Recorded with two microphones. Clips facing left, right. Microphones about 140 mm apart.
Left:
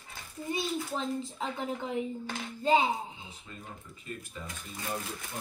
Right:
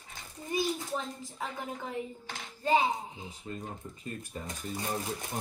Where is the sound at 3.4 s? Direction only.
40° right (ahead or behind).